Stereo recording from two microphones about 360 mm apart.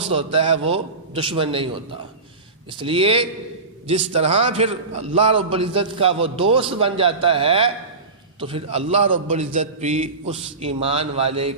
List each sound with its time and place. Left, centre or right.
0.1 s a man's voice: centre